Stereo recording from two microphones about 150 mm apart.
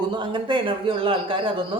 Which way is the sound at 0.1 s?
30° right (ahead or behind).